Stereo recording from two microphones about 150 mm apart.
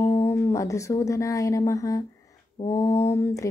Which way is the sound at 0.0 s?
20° left (ahead or behind).